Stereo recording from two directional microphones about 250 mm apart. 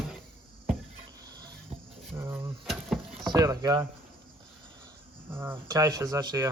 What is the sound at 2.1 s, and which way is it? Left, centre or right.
Speech, centre.